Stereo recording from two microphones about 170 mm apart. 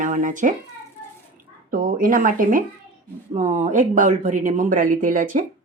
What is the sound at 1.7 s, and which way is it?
Speech, 55° right (ahead or behind).